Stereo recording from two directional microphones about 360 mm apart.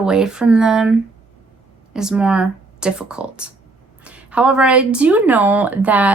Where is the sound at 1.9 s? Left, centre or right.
Centre.